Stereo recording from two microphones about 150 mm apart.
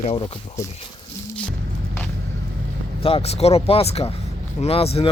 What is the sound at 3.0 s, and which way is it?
Speech, 40° left (ahead or behind).